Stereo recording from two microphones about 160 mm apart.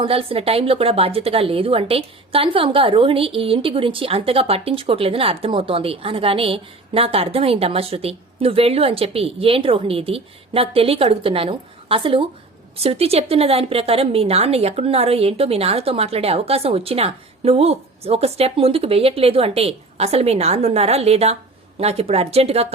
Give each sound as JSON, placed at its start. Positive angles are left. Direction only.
{"t": 0.0, "sound": "a woman's voice", "side_deg": -35}